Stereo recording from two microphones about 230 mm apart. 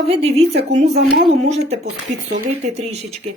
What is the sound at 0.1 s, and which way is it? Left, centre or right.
Speech, right.